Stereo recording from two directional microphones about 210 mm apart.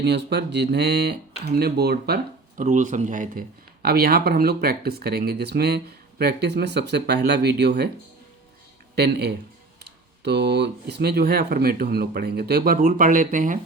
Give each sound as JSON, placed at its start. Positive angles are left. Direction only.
{"t": 0.0, "sound": "speech", "side_deg": -55}
{"t": 9.0, "sound": "speech", "side_deg": -50}